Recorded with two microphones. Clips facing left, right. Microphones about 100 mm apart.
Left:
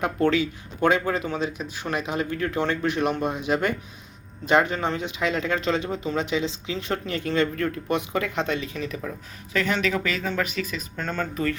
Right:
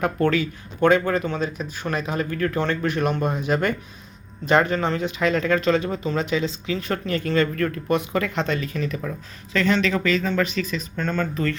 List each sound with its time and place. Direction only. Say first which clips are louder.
0.0 s speech: right 1 dB; 10° left (ahead or behind)